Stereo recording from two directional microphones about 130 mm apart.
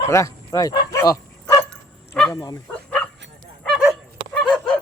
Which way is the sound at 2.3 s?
30° left (ahead or behind).